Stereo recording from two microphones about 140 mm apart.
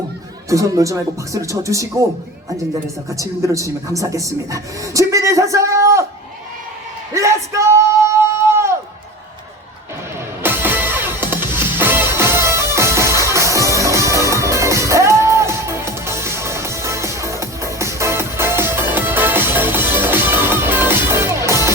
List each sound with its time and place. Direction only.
0.5 s speech: 25° right (ahead or behind)
3.1 s speech: 20° right (ahead or behind)
7.1 s singing: 20° right (ahead or behind)
10.4 s music: 15° right (ahead or behind)